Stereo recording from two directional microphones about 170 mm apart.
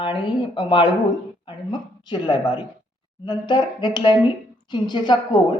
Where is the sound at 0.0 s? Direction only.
25° left (ahead or behind).